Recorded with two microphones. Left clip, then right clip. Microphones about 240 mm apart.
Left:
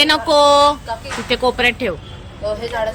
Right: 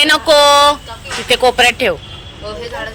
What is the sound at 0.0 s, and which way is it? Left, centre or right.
Speech, centre.